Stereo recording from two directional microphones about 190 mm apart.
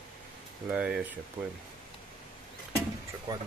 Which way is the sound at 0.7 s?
5° right (ahead or behind).